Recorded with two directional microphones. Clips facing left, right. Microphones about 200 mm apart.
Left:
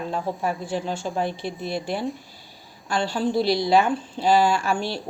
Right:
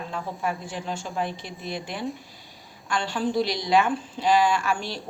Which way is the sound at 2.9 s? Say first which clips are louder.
Left 3 dB; 35° left (ahead or behind).